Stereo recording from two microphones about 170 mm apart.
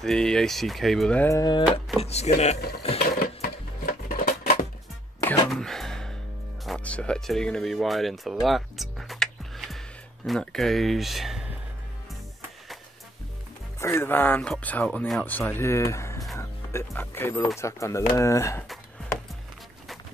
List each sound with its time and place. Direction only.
0.0 s speech: 5° left (ahead or behind)
1.3 s a sound: 25° left (ahead or behind)
2.0 s speech: 40° left (ahead or behind)
3.4 s a sound: 55° left (ahead or behind)
5.5 s music: centre (ahead or behind)
6.6 s speech: 5° left (ahead or behind)
13.7 s speech: 15° left (ahead or behind)